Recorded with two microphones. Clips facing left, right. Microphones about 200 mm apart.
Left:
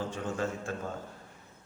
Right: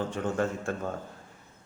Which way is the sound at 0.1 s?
55° right (ahead or behind).